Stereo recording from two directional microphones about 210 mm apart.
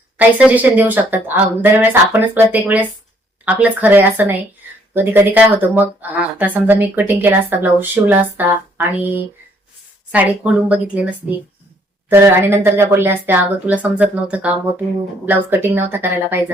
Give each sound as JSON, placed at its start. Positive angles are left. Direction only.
{"t": 0.2, "sound": "speech", "side_deg": -5}